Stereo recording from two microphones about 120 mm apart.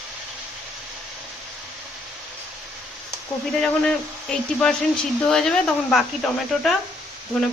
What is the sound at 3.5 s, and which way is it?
Speech, 5° left (ahead or behind).